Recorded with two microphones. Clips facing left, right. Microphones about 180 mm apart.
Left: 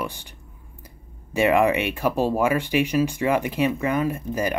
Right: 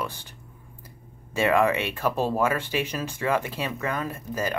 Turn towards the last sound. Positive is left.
turn(degrees=15)  # may be behind; listen again after turning